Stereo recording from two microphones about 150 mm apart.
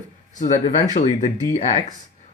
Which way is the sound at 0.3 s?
55° left (ahead or behind).